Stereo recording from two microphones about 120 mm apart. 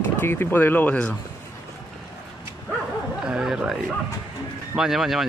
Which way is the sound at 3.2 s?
5° right (ahead or behind).